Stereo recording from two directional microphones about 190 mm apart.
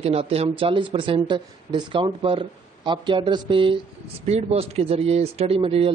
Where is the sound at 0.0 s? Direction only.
30° right (ahead or behind).